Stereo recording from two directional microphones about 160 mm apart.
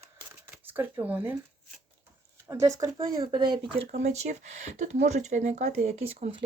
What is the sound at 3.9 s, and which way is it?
Speech, 45° right (ahead or behind).